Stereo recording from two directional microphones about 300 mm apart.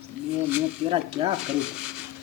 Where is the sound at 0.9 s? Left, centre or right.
Centre.